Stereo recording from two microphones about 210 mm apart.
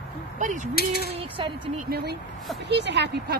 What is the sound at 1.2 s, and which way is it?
Speech, 25° right (ahead or behind).